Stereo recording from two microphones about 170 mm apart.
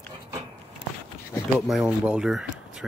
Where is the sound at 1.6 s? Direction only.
Centre (ahead or behind).